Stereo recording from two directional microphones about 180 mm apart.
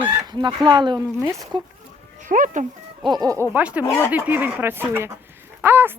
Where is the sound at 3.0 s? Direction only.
20° right (ahead or behind).